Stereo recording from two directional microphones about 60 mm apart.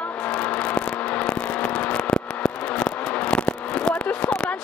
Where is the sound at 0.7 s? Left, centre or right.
Centre.